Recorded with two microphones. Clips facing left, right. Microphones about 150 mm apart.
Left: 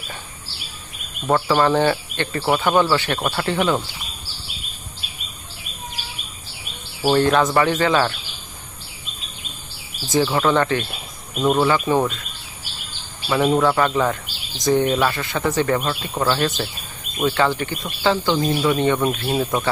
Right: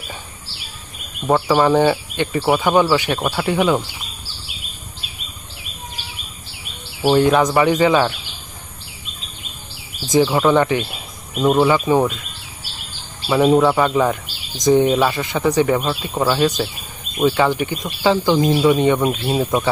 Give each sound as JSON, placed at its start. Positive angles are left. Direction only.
{"t": 1.3, "sound": "speech", "side_deg": -10}
{"t": 7.1, "sound": "speech", "side_deg": -10}
{"t": 10.1, "sound": "speech", "side_deg": -15}
{"t": 13.3, "sound": "speech", "side_deg": -10}